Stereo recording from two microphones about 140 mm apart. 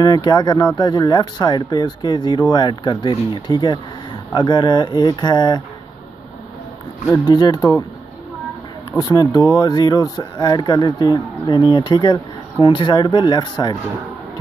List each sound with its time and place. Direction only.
0.0 s speech: 30° left (ahead or behind)
7.2 s speech: 30° left (ahead or behind)
8.9 s speech: 30° left (ahead or behind)